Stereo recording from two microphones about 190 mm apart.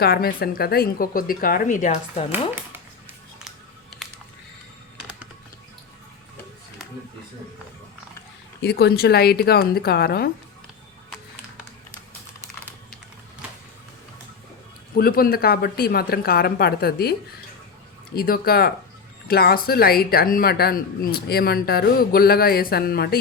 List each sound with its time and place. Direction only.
0.0 s speech: 50° left (ahead or behind)
2.6 s a sound: 10° right (ahead or behind)
8.6 s a woman's voice: 55° left (ahead or behind)
14.9 s speech: 50° left (ahead or behind)